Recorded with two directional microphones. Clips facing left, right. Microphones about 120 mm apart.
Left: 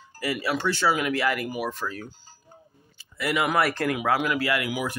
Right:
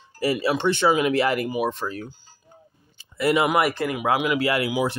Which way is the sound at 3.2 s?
25° right (ahead or behind).